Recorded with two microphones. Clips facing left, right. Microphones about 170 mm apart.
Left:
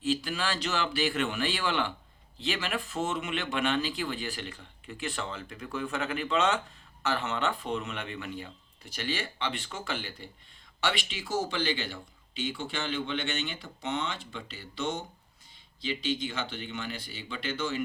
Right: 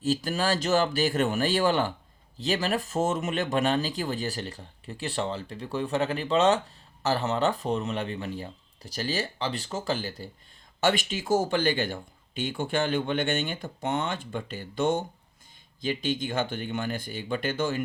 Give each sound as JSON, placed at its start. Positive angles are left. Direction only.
{"t": 0.0, "sound": "speech", "side_deg": -40}